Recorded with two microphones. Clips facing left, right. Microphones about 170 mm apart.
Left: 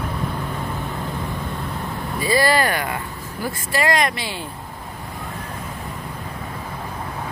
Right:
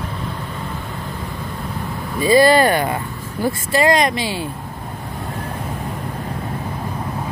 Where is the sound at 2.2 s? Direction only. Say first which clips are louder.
Right 7 dB; 20° right (ahead or behind).